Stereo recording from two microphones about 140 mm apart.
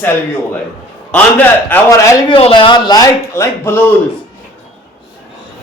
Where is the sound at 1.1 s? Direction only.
15° left (ahead or behind).